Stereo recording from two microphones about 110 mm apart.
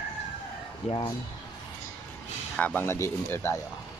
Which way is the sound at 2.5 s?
15° left (ahead or behind).